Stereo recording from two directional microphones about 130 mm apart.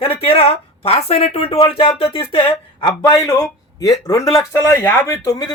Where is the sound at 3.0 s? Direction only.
25° left (ahead or behind).